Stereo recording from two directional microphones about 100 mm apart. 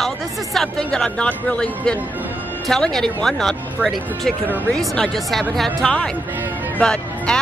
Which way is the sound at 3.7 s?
5° right (ahead or behind).